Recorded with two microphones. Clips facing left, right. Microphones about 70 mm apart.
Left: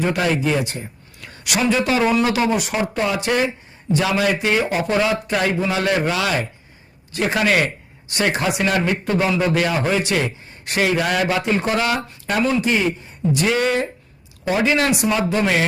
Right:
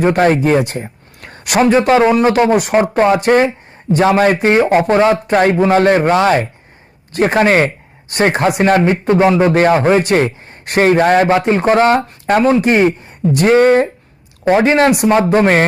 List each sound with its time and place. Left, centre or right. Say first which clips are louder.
0.0 s speech: right 8 dB; right